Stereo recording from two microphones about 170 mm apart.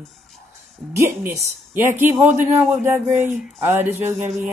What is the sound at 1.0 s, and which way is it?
Speech, 15° right (ahead or behind).